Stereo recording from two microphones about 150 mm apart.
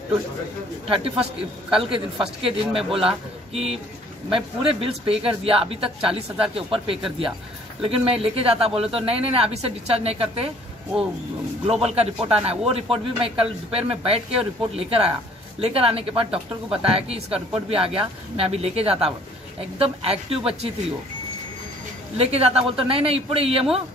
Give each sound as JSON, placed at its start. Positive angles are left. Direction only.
{"t": 0.8, "sound": "speech", "side_deg": -35}
{"t": 11.6, "sound": "speech", "side_deg": -45}
{"t": 22.1, "sound": "speech", "side_deg": -40}